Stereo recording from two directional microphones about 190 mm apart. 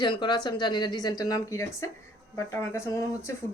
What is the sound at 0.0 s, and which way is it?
A woman's voice, 25° left (ahead or behind).